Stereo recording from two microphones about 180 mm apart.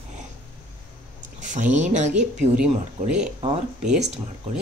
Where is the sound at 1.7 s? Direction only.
40° right (ahead or behind).